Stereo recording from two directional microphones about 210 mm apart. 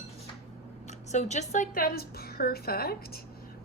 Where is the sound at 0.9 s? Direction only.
35° left (ahead or behind).